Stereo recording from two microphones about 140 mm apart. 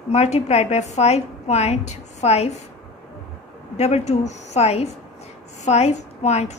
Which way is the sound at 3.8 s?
50° left (ahead or behind).